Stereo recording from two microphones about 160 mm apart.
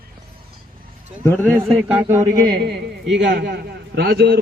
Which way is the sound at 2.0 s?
20° right (ahead or behind).